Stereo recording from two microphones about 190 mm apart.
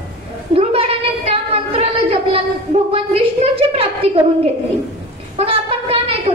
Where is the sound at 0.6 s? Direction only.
30° right (ahead or behind).